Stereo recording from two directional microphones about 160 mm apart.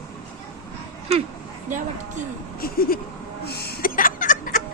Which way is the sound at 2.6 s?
65° left (ahead or behind).